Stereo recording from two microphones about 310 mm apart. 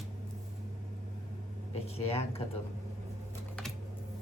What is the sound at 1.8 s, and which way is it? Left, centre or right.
Speech, centre.